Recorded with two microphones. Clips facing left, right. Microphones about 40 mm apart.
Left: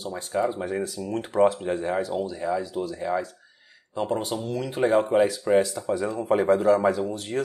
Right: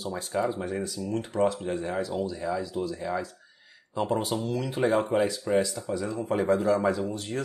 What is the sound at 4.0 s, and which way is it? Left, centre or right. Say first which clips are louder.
Speech: even; centre.